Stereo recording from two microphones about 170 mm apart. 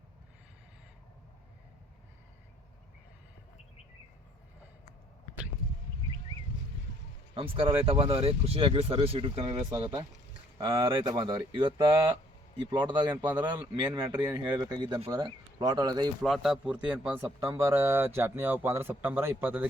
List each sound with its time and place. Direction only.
7.3 s speech: 30° right (ahead or behind)
12.7 s speech: 25° right (ahead or behind)
16.2 s a man's voice: centre (ahead or behind)